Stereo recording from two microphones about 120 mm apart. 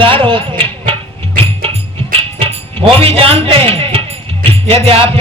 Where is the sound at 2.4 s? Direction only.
55° right (ahead or behind).